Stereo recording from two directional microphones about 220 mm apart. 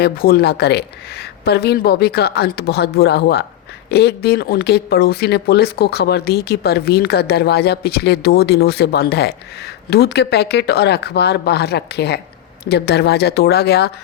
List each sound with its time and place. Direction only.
0.0 s speech: 45° left (ahead or behind)